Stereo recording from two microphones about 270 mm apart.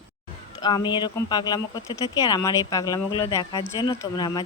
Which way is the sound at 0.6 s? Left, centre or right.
Centre.